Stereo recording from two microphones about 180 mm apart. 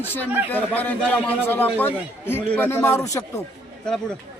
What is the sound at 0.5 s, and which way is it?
A man's voice, 10° left (ahead or behind).